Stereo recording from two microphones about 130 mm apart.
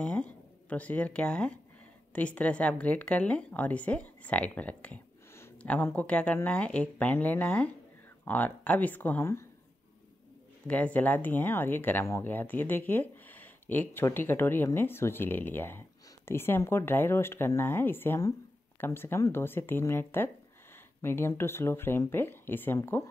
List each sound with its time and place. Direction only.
0.0 s a woman's voice: 10° left (ahead or behind)
10.7 s a woman's voice: 10° left (ahead or behind)